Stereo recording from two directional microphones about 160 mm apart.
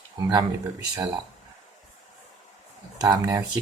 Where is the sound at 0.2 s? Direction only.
25° right (ahead or behind).